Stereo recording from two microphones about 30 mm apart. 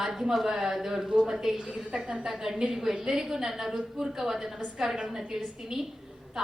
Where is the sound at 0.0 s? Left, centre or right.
Centre.